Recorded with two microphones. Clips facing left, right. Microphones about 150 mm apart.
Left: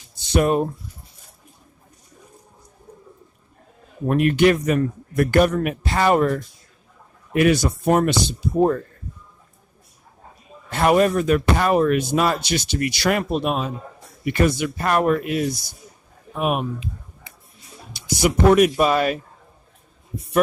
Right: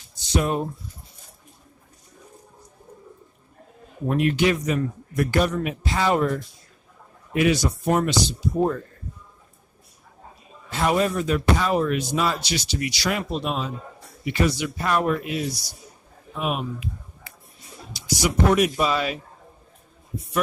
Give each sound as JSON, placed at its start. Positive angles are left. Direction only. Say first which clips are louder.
{"t": 0.3, "sound": "speech", "louder": "left 5 dB", "side_deg": 60}
{"t": 4.1, "sound": "speech", "louder": "left 4 dB", "side_deg": 55}
{"t": 10.7, "sound": "speech", "louder": "left 5 dB", "side_deg": 55}
{"t": 17.3, "sound": "a sound", "louder": "even", "side_deg": 20}
{"t": 17.9, "sound": "speech", "louder": "left 3 dB", "side_deg": 55}